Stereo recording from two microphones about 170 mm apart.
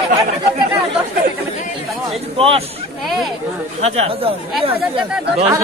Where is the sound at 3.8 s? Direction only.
35° right (ahead or behind).